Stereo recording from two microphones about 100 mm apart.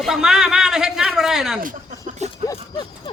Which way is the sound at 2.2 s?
90° right.